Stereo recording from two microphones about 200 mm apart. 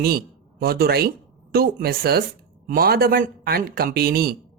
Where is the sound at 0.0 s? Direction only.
50° right (ahead or behind).